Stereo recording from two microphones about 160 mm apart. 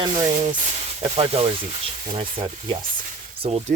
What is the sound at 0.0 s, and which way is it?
Speech, 35° right (ahead or behind).